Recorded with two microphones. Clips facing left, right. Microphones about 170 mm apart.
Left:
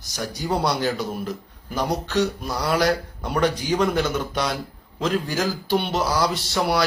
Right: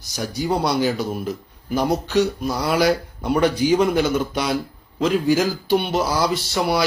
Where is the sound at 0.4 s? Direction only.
Centre (ahead or behind).